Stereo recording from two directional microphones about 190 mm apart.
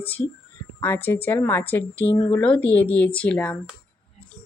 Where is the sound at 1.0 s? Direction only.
10° left (ahead or behind).